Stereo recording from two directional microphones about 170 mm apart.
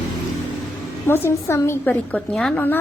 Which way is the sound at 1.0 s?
15° left (ahead or behind).